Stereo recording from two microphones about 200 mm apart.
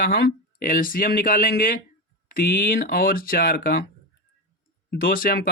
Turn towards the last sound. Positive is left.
turn(degrees=45)  # may be behind; listen again after turning